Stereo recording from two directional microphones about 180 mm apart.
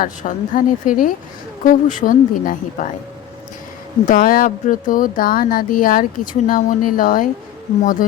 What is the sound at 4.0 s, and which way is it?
Speech, 50° left (ahead or behind).